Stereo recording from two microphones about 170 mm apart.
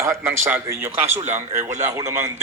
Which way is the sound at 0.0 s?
15° right (ahead or behind).